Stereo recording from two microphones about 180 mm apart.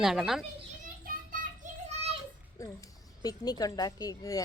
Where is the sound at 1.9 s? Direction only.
35° right (ahead or behind).